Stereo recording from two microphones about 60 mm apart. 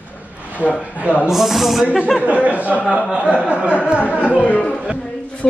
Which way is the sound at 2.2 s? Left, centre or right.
Right.